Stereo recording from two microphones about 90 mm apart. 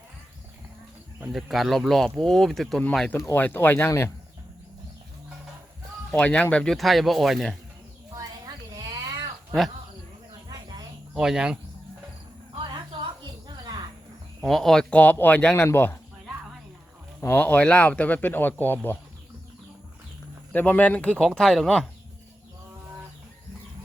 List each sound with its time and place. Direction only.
1.3 s speech: centre (ahead or behind)
3.3 s speech: 20° left (ahead or behind)
6.1 s speech: 15° left (ahead or behind)
6.7 s speech: centre (ahead or behind)
8.1 s a sound: 40° right (ahead or behind)
11.1 s speech: 5° right (ahead or behind)
12.5 s cricket: 65° right (ahead or behind)
14.4 s speech: 5° left (ahead or behind); by 16.0 s 25° left (ahead or behind)
17.2 s speech: 20° left (ahead or behind)
20.5 s speech: 20° left (ahead or behind)